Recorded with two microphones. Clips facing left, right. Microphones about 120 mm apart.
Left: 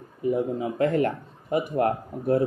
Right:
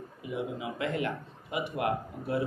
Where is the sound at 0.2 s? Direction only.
40° left (ahead or behind).